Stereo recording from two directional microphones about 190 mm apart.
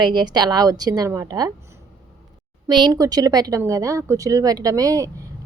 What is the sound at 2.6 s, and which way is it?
A woman's voice, 20° right (ahead or behind).